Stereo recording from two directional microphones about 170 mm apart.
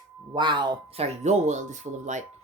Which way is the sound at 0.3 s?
25° right (ahead or behind).